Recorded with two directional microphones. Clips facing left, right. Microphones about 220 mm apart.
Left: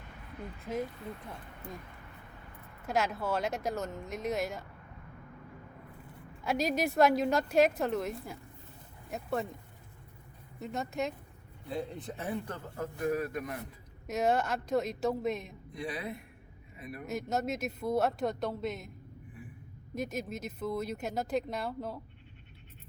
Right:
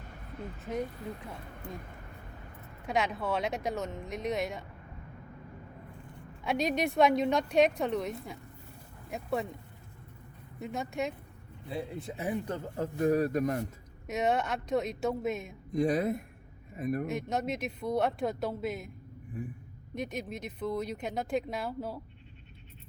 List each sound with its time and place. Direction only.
2.8 s speech: centre (ahead or behind)
6.4 s speech: centre (ahead or behind)
10.6 s a man's voice: centre (ahead or behind); by 13.7 s 40° right (ahead or behind)
14.1 s speech: centre (ahead or behind)
15.7 s speech: 45° right (ahead or behind)
17.1 s speech: centre (ahead or behind)
19.4 s speech: 45° right (ahead or behind)
19.9 s speech: 5° left (ahead or behind)